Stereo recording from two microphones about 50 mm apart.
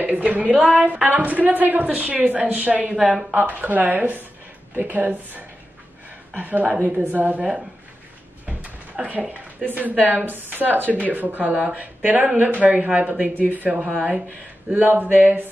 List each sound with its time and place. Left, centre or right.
0.0 s a woman's voice: right
3.3 s a woman's voice: right
8.5 s a sound: right
9.7 s a woman's voice: right